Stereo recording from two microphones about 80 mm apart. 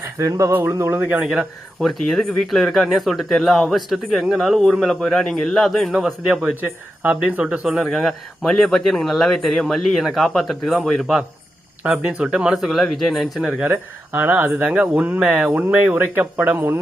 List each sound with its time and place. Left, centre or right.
0.3 s a sound: right
0.8 s speech: right
1.2 s speech: centre
1.8 s speech: centre
11.8 s speech: centre
13.6 s speech: right
15.4 s speech: right